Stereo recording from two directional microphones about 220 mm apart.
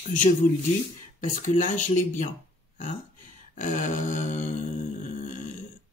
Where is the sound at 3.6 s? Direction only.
35° left (ahead or behind).